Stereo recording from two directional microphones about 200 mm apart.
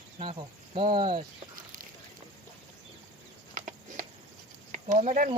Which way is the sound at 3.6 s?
40° right (ahead or behind).